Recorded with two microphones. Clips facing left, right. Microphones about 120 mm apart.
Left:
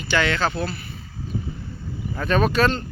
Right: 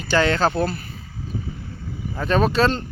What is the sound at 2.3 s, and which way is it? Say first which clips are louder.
Speech: right 1 dB; 25° right (ahead or behind).